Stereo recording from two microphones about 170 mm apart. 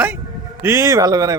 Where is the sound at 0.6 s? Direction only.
20° right (ahead or behind).